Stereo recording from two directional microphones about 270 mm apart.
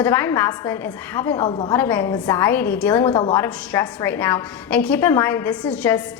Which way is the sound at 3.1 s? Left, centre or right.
Centre.